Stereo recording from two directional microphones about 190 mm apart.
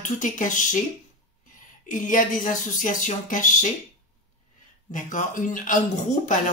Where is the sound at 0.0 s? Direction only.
40° left (ahead or behind).